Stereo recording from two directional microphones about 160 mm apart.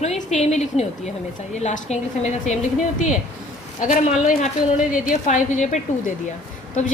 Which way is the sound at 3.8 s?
55° left (ahead or behind).